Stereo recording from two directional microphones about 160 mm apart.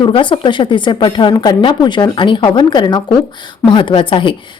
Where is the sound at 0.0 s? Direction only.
30° left (ahead or behind).